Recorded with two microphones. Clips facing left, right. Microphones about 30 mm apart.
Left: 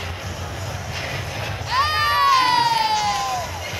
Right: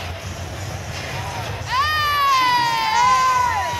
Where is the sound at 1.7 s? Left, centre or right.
Centre.